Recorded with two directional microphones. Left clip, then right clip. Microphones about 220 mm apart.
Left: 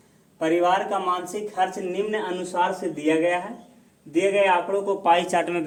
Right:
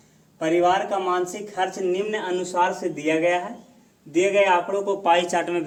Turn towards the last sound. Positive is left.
turn(degrees=10)  # may be behind; listen again after turning